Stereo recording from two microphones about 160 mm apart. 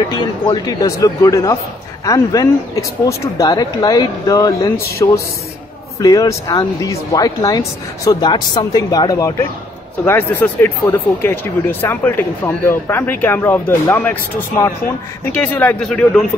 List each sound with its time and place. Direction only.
0.1 s speech: 25° left (ahead or behind); by 16.3 s 5° left (ahead or behind)